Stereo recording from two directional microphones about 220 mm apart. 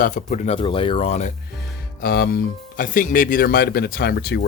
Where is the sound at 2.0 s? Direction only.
45° left (ahead or behind).